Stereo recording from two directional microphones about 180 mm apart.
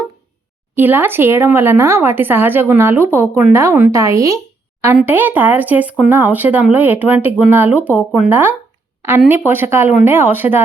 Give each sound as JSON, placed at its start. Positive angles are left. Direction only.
{"t": 0.8, "sound": "speech", "side_deg": -10}